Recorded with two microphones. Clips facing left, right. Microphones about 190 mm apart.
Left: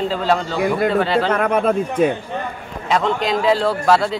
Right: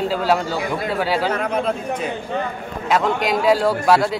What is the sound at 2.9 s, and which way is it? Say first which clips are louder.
Speech: even; 10° right (ahead or behind).